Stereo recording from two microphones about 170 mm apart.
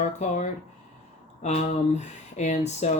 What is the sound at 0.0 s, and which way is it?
Speech, 45° left (ahead or behind).